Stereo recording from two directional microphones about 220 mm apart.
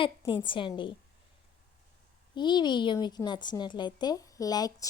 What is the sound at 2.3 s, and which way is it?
A woman's voice, 20° left (ahead or behind).